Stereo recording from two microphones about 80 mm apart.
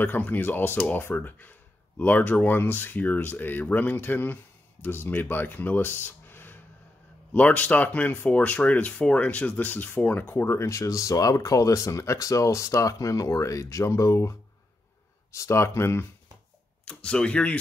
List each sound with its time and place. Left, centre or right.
0.0 s speech: left
6.0 s a sound: left
7.3 s speech: centre; by 14.3 s left
15.3 s speech: left
16.8 s speech: centre